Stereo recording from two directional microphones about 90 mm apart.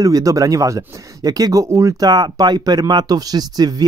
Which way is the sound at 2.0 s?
50° right (ahead or behind).